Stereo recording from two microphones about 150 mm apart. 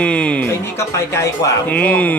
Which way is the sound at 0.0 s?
10° left (ahead or behind).